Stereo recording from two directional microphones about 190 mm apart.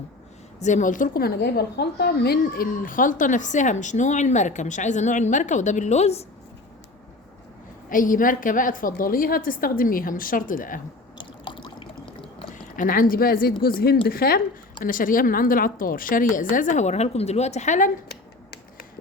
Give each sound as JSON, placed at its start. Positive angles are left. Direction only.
{"t": 0.6, "sound": "a woman's voice", "side_deg": 40}
{"t": 7.9, "sound": "speech", "side_deg": 45}
{"t": 11.2, "sound": "water", "side_deg": 25}
{"t": 12.7, "sound": "speech", "side_deg": 45}